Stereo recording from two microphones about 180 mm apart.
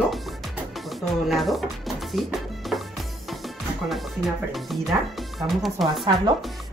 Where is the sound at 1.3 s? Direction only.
Centre (ahead or behind).